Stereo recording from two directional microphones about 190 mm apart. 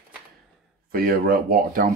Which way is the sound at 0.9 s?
50° right (ahead or behind).